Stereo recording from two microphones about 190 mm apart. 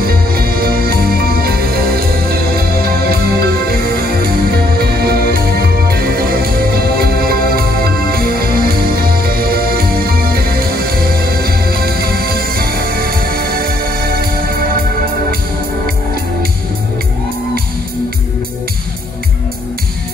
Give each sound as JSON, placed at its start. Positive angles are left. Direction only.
{"t": 0.0, "sound": "music", "side_deg": -50}